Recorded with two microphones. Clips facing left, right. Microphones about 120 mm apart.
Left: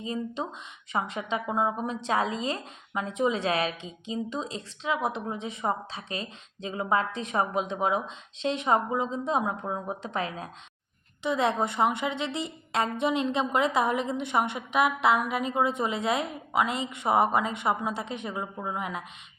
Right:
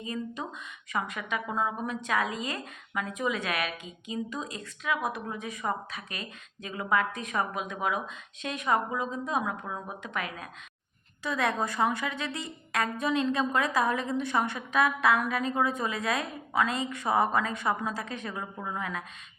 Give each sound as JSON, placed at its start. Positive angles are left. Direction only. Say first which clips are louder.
{"t": 0.0, "sound": "a woman's voice", "louder": "left 3 dB", "side_deg": 25}